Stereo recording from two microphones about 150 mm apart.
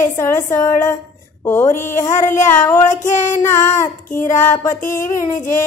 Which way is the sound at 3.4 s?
20° left (ahead or behind).